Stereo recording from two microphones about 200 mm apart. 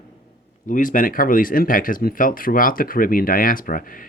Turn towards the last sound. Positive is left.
turn(degrees=45)  # may be behind; listen again after turning